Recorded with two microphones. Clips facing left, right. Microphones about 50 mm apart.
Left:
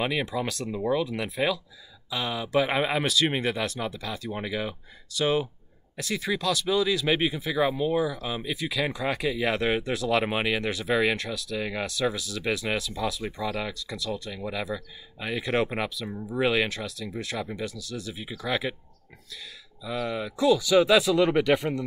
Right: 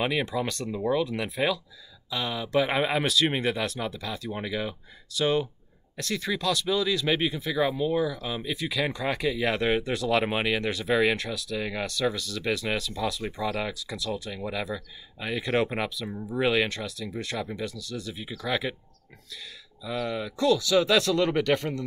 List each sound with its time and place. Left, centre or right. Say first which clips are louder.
0.0 s speech: right 1 dB; centre
19.8 s speech: even; centre